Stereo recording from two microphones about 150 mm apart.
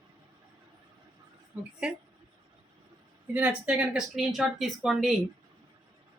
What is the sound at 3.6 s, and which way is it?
Speech, 5° right (ahead or behind).